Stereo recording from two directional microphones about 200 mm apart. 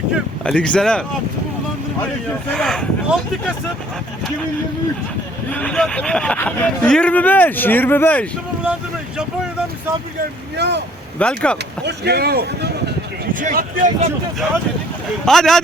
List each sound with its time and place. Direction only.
0.4 s speech: 5° left (ahead or behind)
2.6 s speech: 5° left (ahead or behind)
5.5 s speech: 5° left (ahead or behind)
8.6 s speech: 5° right (ahead or behind)
10.6 s speech: 60° right (ahead or behind)
11.2 s speech: 5° left (ahead or behind)
11.9 s speech: 55° right (ahead or behind)
15.2 s speech: centre (ahead or behind)